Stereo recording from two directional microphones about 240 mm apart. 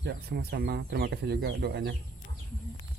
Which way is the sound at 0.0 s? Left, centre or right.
Right.